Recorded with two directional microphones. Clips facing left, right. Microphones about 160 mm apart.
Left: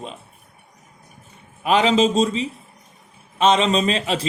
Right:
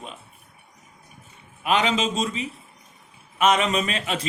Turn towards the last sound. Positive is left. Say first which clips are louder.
# left 5 dB
turn(degrees=35)  # may be behind; listen again after turning